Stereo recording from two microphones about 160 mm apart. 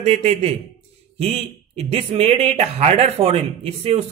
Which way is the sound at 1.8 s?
40° right (ahead or behind).